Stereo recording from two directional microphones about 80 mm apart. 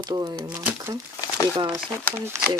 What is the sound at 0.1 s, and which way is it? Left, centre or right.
Speech, right.